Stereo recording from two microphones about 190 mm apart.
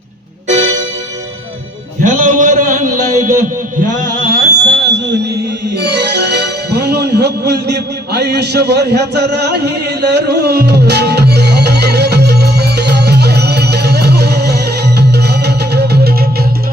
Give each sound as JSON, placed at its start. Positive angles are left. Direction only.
{"t": 2.0, "sound": "a man's voice", "side_deg": -40}
{"t": 3.8, "sound": "buzzer", "side_deg": -45}
{"t": 5.7, "sound": "music", "side_deg": -60}